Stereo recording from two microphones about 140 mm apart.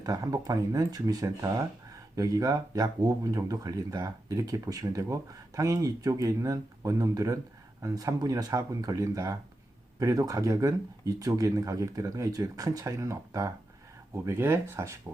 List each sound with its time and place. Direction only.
0.0 s speech: 25° right (ahead or behind)